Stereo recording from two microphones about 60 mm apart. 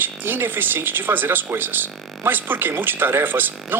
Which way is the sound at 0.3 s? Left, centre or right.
Right.